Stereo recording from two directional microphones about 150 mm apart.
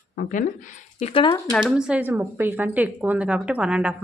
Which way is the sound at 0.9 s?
45° left (ahead or behind).